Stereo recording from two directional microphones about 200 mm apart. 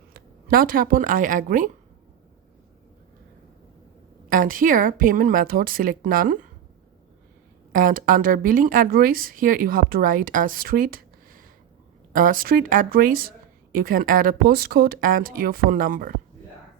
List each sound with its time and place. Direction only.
0.1 s speech: 45° right (ahead or behind)
4.3 s a woman's voice: 45° right (ahead or behind)
7.7 s a woman's voice: 45° right (ahead or behind)